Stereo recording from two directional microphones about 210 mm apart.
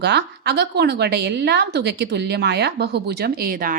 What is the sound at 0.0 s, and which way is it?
A woman's voice, 50° right (ahead or behind).